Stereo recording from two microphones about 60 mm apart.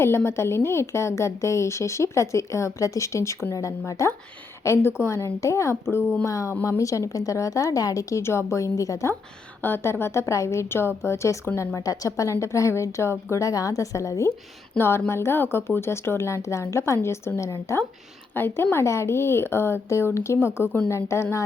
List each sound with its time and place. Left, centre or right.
0.3 s a woman's voice: left
3.5 s a woman's voice: left
4.6 s a woman's voice: left
8.2 s a woman's voice: left
9.6 s a woman's voice: left
13.3 s a woman's voice: left
14.8 s a woman's voice: left
18.3 s a woman's voice: left